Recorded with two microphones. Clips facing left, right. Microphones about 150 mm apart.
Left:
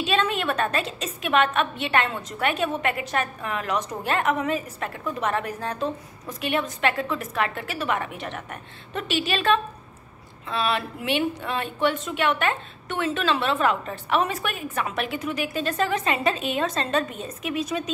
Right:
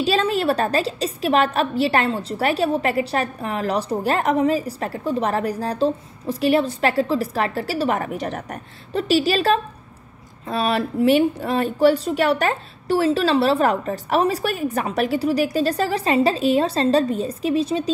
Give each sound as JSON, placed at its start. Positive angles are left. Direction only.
{"t": 0.0, "sound": "a woman's voice", "side_deg": -35}